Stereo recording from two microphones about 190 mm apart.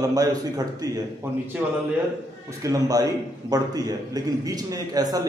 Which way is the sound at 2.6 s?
20° right (ahead or behind).